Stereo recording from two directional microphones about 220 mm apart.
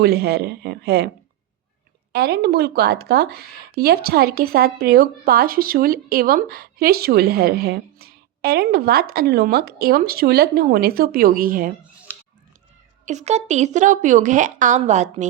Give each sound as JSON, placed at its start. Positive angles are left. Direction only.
{"t": 0.0, "sound": "speech", "side_deg": -45}
{"t": 2.1, "sound": "speech", "side_deg": -45}
{"t": 13.1, "sound": "a woman's voice", "side_deg": -30}